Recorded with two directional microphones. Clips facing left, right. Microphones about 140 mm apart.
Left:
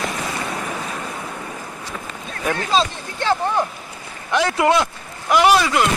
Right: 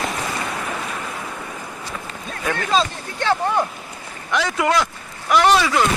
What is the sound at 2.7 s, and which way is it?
Speech, 20° left (ahead or behind).